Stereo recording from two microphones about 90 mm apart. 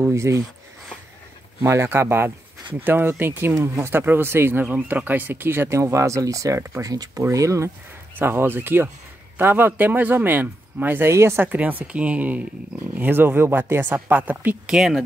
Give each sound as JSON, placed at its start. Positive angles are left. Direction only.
{"t": 0.0, "sound": "speech", "side_deg": -30}
{"t": 1.6, "sound": "speech", "side_deg": -30}
{"t": 3.5, "sound": "speech", "side_deg": -35}
{"t": 8.2, "sound": "speech", "side_deg": -25}
{"t": 11.5, "sound": "speech", "side_deg": -15}
{"t": 14.7, "sound": "speech", "side_deg": -5}